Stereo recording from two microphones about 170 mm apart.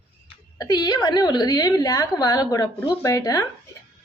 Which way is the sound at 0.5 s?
25° left (ahead or behind).